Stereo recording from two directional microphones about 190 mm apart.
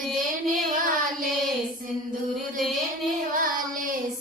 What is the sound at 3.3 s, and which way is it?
Child singing, 45° right (ahead or behind).